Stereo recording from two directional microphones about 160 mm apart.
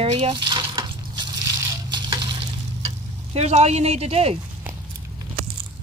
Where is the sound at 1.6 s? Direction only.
25° right (ahead or behind).